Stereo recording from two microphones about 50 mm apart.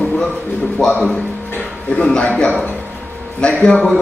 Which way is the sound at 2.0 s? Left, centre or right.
Centre.